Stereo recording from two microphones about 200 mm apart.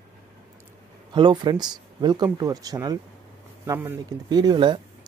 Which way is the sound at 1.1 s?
25° right (ahead or behind).